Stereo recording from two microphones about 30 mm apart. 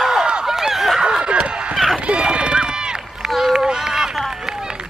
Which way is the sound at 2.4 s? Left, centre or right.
Right.